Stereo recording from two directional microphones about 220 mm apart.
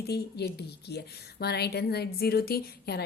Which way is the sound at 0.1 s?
45° left (ahead or behind).